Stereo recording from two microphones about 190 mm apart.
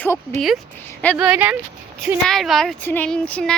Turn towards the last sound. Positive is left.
turn(degrees=5)  # may be behind; listen again after turning